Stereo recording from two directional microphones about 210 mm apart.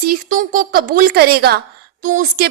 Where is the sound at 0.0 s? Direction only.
40° right (ahead or behind).